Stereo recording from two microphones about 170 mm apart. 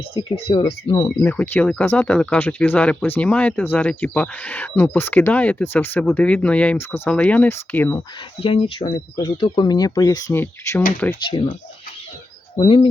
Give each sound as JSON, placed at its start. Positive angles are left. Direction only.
{"t": 0.1, "sound": "speech", "side_deg": 30}
{"t": 1.2, "sound": "speech", "side_deg": 10}
{"t": 8.4, "sound": "speech", "side_deg": 35}
{"t": 11.3, "sound": "speech", "side_deg": 30}
{"t": 12.6, "sound": "speech", "side_deg": 30}